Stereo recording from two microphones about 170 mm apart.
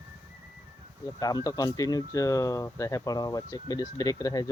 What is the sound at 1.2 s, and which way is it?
Speech, 20° left (ahead or behind).